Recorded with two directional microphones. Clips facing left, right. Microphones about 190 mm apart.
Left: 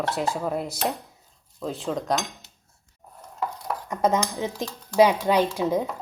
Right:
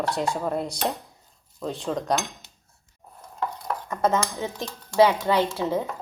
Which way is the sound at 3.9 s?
15° left (ahead or behind).